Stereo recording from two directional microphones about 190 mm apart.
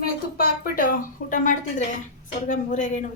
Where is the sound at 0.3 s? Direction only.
50° left (ahead or behind).